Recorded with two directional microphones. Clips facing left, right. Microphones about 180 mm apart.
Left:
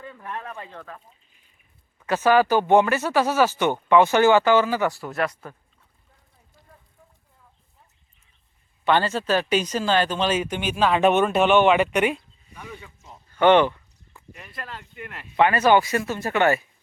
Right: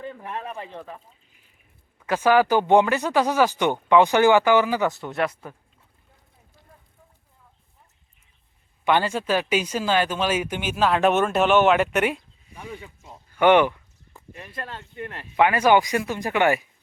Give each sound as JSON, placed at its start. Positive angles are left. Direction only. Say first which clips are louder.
{"t": 0.0, "sound": "speech", "louder": "right 2 dB", "side_deg": -25}
{"t": 2.0, "sound": "speech", "louder": "even", "side_deg": -10}
{"t": 5.0, "sound": "speech", "louder": "right 1 dB", "side_deg": 0}
{"t": 8.8, "sound": "speech", "louder": "even", "side_deg": -15}
{"t": 12.7, "sound": "a sound", "louder": "right 3 dB", "side_deg": -15}
{"t": 14.1, "sound": "speech", "louder": "right 3 dB", "side_deg": -30}
{"t": 15.4, "sound": "speech", "louder": "even", "side_deg": -10}